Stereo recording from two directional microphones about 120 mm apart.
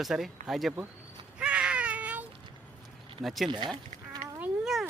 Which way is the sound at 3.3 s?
Centre (ahead or behind).